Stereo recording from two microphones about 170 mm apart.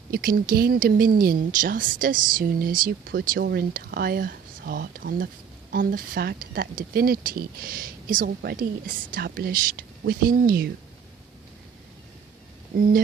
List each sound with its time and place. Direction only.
0.1 s speech: 55° right (ahead or behind)
12.7 s speech: 55° right (ahead or behind)